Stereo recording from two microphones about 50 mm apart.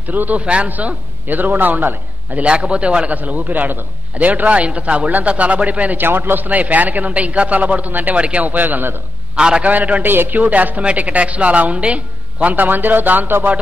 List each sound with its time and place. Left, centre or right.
0.0 s a man's voice: right
0.4 s a man's voice: right
0.7 s a man's voice: right
2.3 s a man's voice: right
6.0 s a man's voice: right
9.3 s a man's voice: right
10.0 s a man's voice: right
10.4 s a man's voice: right
12.5 s a man's voice: right